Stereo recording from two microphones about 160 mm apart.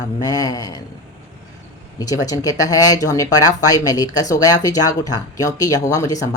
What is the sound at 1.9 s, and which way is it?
Speech, 25° left (ahead or behind).